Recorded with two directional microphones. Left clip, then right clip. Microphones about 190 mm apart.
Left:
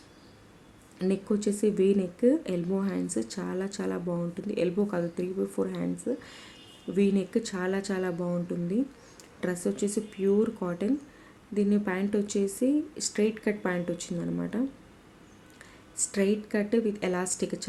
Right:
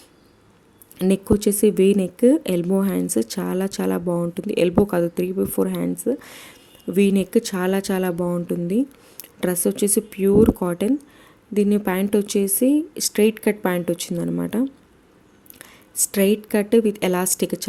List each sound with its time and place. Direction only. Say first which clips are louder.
0.9 s speech: right 9 dB; 50° right (ahead or behind)